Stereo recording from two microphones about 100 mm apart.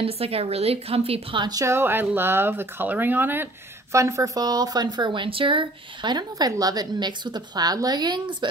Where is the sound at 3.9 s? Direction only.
30° right (ahead or behind).